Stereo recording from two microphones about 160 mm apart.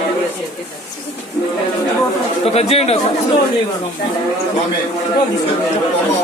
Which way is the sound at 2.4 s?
40° left (ahead or behind).